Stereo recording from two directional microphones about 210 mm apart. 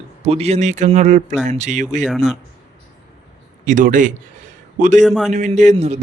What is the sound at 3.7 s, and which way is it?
A man's voice, 40° right (ahead or behind).